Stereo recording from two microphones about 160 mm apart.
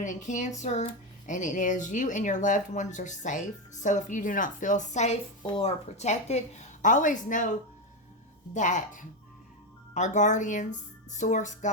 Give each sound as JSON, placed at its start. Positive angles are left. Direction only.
{"t": 0.0, "sound": "speech", "side_deg": 50}
{"t": 8.5, "sound": "speech", "side_deg": 50}